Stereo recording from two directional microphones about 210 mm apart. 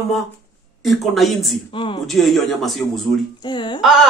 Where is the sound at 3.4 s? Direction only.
20° left (ahead or behind).